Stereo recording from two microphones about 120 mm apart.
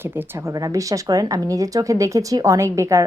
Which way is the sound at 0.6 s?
30° right (ahead or behind).